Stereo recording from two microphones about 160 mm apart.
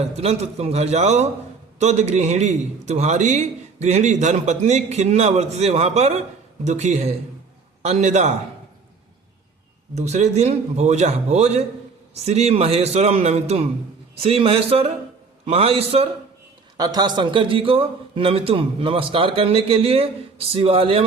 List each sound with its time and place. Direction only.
0.2 s a man's voice: 40° right (ahead or behind)
9.9 s a man's voice: 45° right (ahead or behind)
16.7 s a man's voice: 25° right (ahead or behind)